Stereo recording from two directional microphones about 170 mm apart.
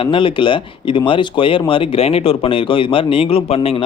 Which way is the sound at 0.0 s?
30° left (ahead or behind).